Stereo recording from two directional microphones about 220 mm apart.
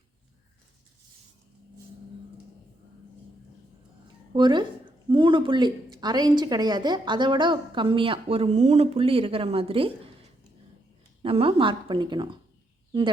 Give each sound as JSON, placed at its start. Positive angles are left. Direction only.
{"t": 4.4, "sound": "speech", "side_deg": -20}
{"t": 11.2, "sound": "speech", "side_deg": -25}